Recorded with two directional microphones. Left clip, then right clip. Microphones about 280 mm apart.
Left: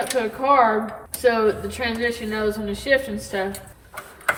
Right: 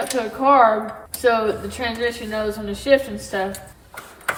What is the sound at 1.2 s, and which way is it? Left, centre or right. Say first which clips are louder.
Speech: even; centre.